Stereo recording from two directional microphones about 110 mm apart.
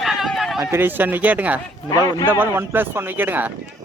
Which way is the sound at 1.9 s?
35° left (ahead or behind).